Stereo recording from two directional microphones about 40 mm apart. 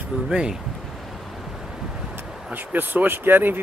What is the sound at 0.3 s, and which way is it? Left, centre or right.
Speech, centre.